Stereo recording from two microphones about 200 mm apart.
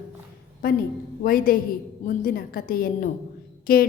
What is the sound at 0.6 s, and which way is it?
A woman's voice, 45° left (ahead or behind).